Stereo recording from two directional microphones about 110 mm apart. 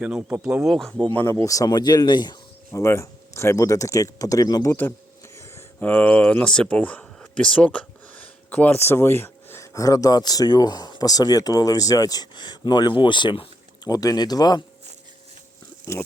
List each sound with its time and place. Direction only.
0.0 s speech: 10° right (ahead or behind)
0.3 s speech: 25° right (ahead or behind)
0.6 s speech: centre (ahead or behind)
1.1 s speech: 20° left (ahead or behind); by 2.4 s 40° left (ahead or behind)
2.7 s speech: 25° left (ahead or behind)
4.7 s speech: 20° left (ahead or behind); by 13.5 s 50° left (ahead or behind)
13.8 s speech: 35° left (ahead or behind)